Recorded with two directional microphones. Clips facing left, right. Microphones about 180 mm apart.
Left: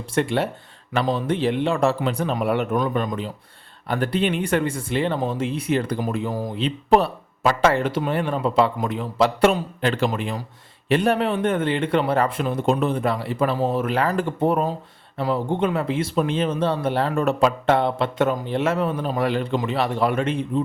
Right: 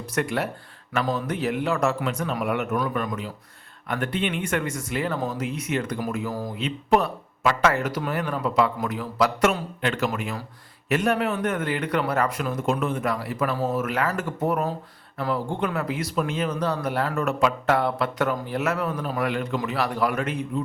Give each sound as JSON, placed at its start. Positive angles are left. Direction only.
{"t": 0.1, "sound": "speech", "side_deg": 30}